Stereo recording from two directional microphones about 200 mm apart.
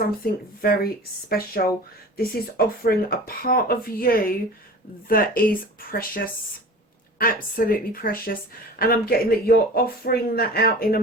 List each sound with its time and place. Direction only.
0.6 s speech: 50° left (ahead or behind)